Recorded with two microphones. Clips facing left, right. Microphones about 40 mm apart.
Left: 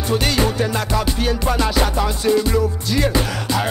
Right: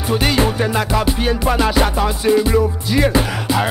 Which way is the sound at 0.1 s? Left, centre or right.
Centre.